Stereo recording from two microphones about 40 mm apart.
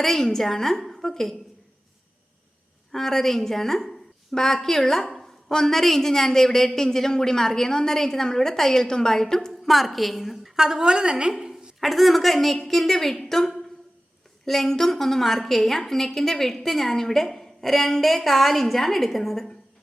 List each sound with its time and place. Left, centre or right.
0.0 s a woman's voice: centre
2.9 s a woman's voice: centre
9.5 s a woman's voice: centre
11.8 s a woman's voice: centre